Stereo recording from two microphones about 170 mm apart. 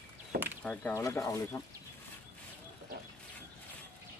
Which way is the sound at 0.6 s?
10° left (ahead or behind).